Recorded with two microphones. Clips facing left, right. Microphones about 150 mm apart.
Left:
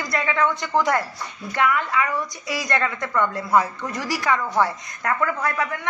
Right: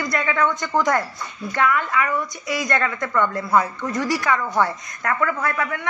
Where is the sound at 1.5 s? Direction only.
25° left (ahead or behind).